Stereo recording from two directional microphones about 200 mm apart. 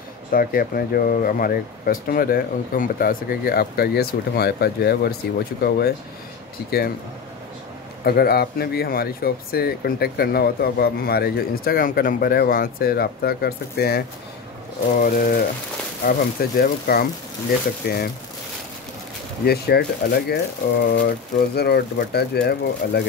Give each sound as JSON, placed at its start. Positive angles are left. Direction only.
{"t": 0.3, "sound": "speech", "side_deg": 45}
{"t": 8.0, "sound": "speech", "side_deg": 50}
{"t": 19.4, "sound": "speech", "side_deg": 50}